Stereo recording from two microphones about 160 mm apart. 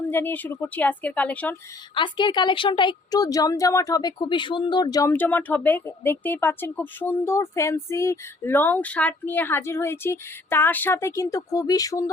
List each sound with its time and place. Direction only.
0.1 s speech: 15° left (ahead or behind)
2.0 s a woman's voice: 30° left (ahead or behind)
5.1 s speech: 10° left (ahead or behind)